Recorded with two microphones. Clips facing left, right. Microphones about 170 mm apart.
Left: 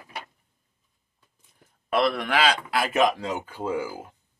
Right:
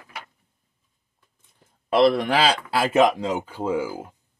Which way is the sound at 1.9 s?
30° right (ahead or behind).